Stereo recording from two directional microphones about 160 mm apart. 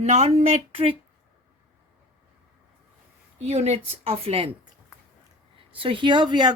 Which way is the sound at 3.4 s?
40° right (ahead or behind).